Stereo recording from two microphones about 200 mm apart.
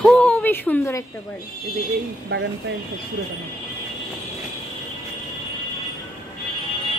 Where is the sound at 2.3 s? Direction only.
60° right (ahead or behind).